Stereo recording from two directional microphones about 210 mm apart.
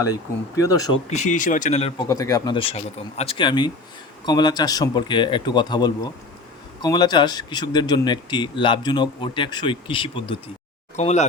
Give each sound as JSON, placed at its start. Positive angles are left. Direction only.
{"t": 0.0, "sound": "speech", "side_deg": 15}
{"t": 1.1, "sound": "speech", "side_deg": 35}
{"t": 2.0, "sound": "speech", "side_deg": 15}